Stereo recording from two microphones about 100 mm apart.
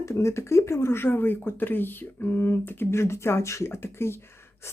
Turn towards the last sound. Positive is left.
turn(degrees=25)  # may be behind; listen again after turning